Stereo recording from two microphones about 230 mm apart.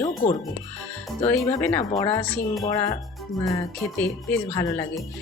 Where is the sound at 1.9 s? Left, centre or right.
Centre.